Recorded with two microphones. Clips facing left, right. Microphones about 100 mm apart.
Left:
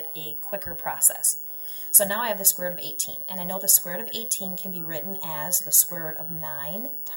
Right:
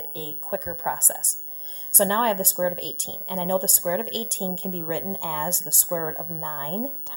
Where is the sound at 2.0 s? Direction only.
40° right (ahead or behind).